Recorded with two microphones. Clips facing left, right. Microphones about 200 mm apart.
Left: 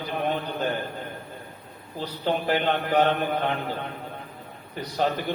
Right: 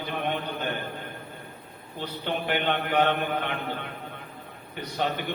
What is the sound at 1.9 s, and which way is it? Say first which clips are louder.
A man's voice: left 4 dB; 35° left (ahead or behind).